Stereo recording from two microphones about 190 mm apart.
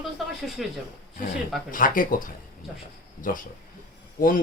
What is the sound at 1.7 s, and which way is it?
Speech, 45° left (ahead or behind).